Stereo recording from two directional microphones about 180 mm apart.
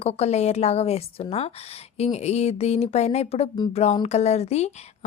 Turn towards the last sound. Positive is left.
turn(degrees=35)  # may be behind; listen again after turning